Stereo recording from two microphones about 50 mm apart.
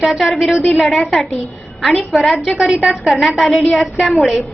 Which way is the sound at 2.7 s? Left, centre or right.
Centre.